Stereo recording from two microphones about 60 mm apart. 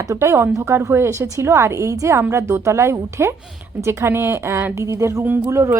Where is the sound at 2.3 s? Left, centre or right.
Right.